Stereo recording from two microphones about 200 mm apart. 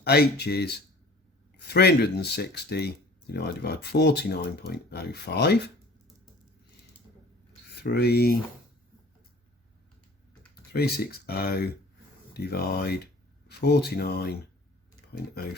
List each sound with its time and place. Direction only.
0.0 s speech: 55° left (ahead or behind)
7.8 s speech: 55° left (ahead or behind)
10.7 s speech: 50° left (ahead or behind)